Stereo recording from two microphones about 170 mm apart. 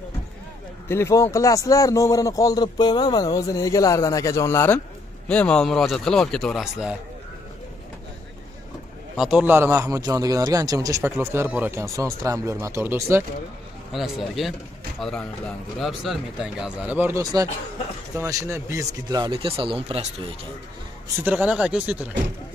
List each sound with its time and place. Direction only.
0.8 s a man's voice: 15° left (ahead or behind); by 7.0 s 5° right (ahead or behind)
9.1 s a man's voice: 5° right (ahead or behind)
13.9 s a man's voice: centre (ahead or behind); by 20.1 s 35° right (ahead or behind)
21.2 s a man's voice: 10° right (ahead or behind)